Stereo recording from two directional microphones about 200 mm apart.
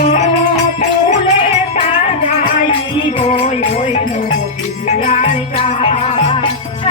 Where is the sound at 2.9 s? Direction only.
30° left (ahead or behind).